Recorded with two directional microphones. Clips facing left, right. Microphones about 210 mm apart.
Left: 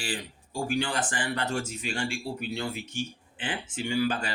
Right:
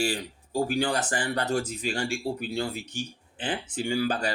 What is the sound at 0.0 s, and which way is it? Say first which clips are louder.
Speech: right 7 dB; 40° right (ahead or behind).